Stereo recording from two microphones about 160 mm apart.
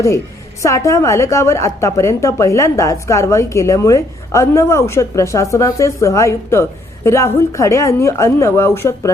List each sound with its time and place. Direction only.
0.6 s a woman's voice: 20° left (ahead or behind)